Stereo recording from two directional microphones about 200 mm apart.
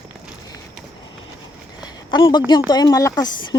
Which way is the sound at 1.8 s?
25° left (ahead or behind).